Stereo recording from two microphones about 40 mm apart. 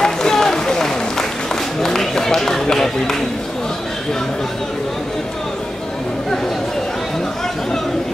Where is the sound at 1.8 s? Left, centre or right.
Centre.